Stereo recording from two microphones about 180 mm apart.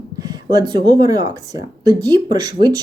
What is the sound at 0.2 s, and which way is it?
Speech, 20° right (ahead or behind).